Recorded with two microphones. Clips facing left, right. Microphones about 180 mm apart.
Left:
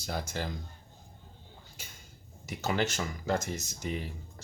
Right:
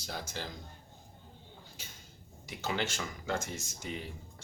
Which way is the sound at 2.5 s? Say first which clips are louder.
Left 4 dB; 45° left (ahead or behind).